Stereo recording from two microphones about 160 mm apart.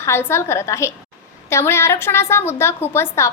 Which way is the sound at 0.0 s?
15° left (ahead or behind).